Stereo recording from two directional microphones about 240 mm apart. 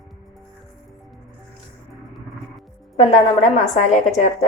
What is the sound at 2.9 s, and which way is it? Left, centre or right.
A woman's voice, left.